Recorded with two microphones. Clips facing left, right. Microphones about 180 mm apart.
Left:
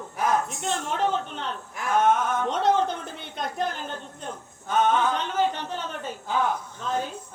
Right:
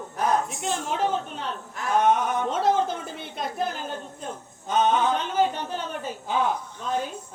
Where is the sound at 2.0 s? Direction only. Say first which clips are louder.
Even; 15° right (ahead or behind).